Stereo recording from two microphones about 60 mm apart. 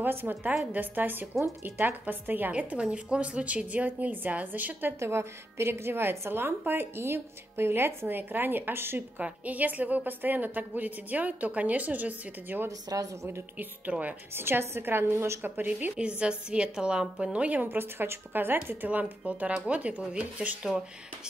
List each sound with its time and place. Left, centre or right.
0.0 s a woman's voice: right
2.5 s a woman's voice: centre
5.0 s a woman's voice: right
9.2 s a woman's voice: right
12.6 s speech: right
13.6 s a woman's voice: right
14.3 s a woman's voice: right
16.0 s a woman's voice: centre
17.6 s a woman's voice: right
18.9 s a woman's voice: right